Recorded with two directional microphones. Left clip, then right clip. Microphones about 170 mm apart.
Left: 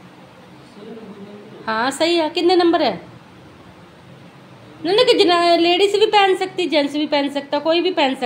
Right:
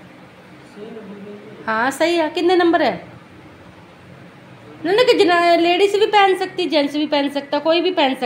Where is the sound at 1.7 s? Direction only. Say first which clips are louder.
Right 1 dB; centre (ahead or behind).